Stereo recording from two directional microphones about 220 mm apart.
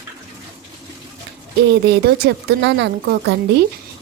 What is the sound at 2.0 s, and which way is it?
Speech, 50° right (ahead or behind).